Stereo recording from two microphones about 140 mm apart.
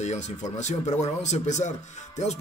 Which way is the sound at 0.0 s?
55° left (ahead or behind).